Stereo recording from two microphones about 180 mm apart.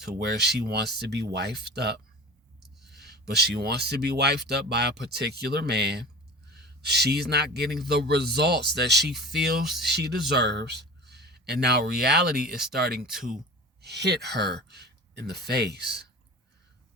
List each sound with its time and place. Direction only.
0.1 s speech: 65° right (ahead or behind)
2.6 s a sound: centre (ahead or behind)
3.0 s speech: 65° right (ahead or behind)